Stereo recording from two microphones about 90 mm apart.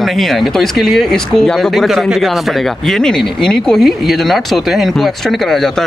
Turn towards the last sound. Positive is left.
turn(degrees=5)  # may be behind; listen again after turning